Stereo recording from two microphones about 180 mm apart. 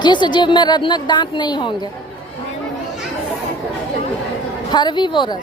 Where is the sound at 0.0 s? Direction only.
25° left (ahead or behind).